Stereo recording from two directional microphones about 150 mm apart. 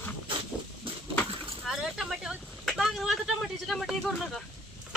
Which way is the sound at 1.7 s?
5° right (ahead or behind).